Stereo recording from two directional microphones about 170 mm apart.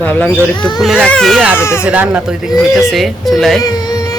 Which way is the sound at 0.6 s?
25° left (ahead or behind).